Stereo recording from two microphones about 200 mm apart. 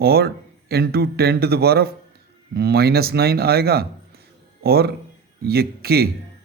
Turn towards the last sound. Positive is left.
turn(degrees=-50)  # may be behind; listen again after turning